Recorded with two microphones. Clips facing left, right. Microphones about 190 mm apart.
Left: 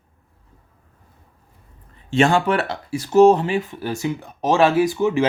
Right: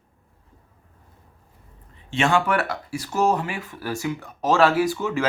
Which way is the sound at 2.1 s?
35° left (ahead or behind).